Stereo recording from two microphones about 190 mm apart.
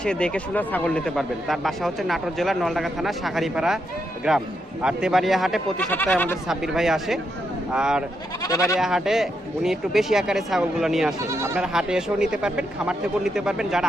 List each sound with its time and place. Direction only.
0.0 s speech: 5° left (ahead or behind)
6.5 s speech: centre (ahead or behind)
8.4 s speech: 15° left (ahead or behind)
8.8 s speech: centre (ahead or behind)
11.2 s speech: 15° right (ahead or behind)